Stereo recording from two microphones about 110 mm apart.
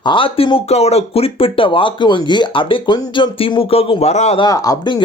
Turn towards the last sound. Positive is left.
turn(degrees=40)  # may be behind; listen again after turning